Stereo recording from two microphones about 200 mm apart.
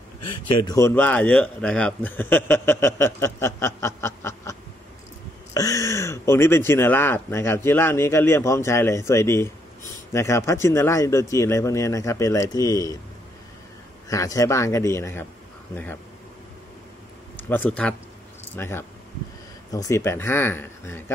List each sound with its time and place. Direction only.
0.6 s a man's voice: 15° left (ahead or behind)
14.0 s a man's voice: 15° left (ahead or behind)
17.5 s a man's voice: 10° left (ahead or behind)